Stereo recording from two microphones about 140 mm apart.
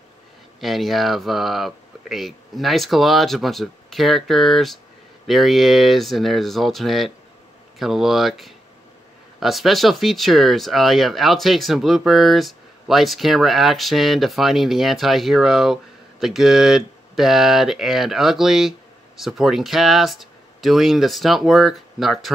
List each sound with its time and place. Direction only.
0.6 s speech: centre (ahead or behind)